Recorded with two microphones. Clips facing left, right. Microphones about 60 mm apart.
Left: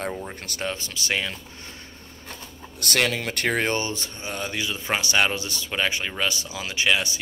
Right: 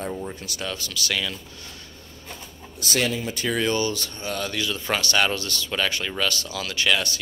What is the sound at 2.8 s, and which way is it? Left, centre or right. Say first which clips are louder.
Speech: left 1 dB; left.